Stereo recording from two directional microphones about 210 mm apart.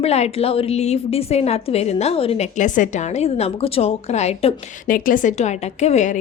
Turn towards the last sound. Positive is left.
turn(degrees=35)  # may be behind; listen again after turning